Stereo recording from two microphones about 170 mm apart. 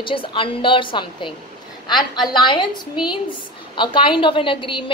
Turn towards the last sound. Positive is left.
turn(degrees=30)  # may be behind; listen again after turning